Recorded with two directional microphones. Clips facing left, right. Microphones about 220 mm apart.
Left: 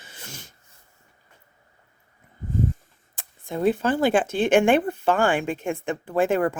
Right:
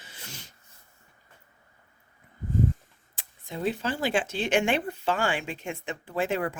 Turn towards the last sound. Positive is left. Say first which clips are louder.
# left 7 dB
turn(degrees=50)  # may be behind; listen again after turning